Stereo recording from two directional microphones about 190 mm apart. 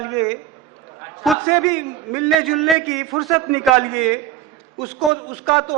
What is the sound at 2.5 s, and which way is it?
Speech, centre (ahead or behind).